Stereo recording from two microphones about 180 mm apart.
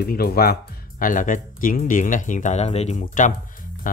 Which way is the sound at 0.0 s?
60° left (ahead or behind).